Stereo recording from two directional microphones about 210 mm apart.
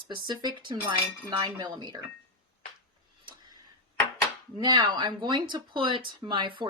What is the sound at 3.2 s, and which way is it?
Tick-tock, 20° right (ahead or behind).